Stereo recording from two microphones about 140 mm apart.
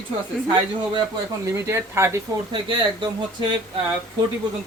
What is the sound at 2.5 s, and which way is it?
Speech, 35° right (ahead or behind).